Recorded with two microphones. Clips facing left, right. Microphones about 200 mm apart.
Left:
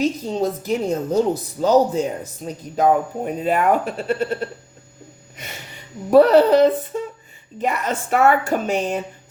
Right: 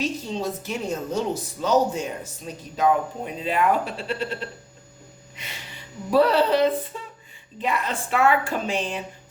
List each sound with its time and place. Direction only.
0.0 s a woman's voice: 35° left (ahead or behind)
6.1 s speech: 45° left (ahead or behind)